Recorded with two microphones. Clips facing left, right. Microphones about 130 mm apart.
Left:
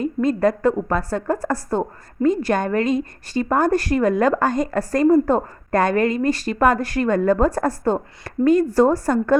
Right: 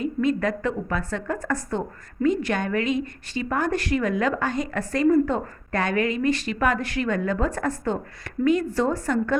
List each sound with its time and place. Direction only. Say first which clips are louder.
0.0 s a woman's voice: left 5 dB; 40° left (ahead or behind)